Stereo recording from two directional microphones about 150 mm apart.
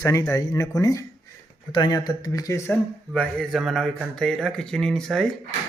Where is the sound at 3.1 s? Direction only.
5° left (ahead or behind).